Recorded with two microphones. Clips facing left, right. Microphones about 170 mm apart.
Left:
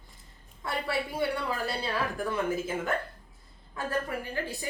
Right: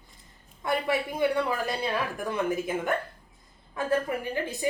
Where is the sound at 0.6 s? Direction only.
20° right (ahead or behind).